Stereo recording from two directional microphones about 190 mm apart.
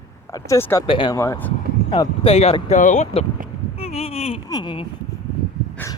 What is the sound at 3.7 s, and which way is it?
Boat, 30° left (ahead or behind).